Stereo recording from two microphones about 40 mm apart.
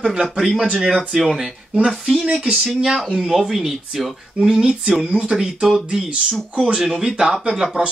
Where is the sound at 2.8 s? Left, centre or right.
Centre.